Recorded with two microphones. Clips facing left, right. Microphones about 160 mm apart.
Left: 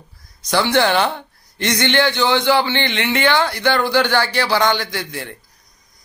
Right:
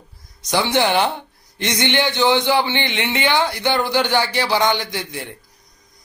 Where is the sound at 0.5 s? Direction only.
20° right (ahead or behind).